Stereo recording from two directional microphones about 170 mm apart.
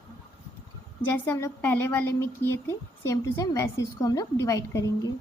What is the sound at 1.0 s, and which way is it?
A woman's voice, 10° left (ahead or behind).